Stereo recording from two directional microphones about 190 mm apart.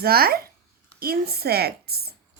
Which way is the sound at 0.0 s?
55° right (ahead or behind).